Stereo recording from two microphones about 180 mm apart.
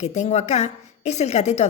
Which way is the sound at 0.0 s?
40° left (ahead or behind).